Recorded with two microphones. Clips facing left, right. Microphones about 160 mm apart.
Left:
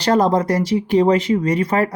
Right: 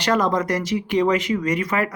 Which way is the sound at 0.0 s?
35° left (ahead or behind).